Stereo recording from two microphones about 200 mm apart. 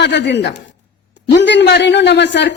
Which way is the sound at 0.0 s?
60° left (ahead or behind).